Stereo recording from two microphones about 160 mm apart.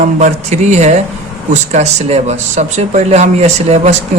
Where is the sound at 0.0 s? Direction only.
50° right (ahead or behind).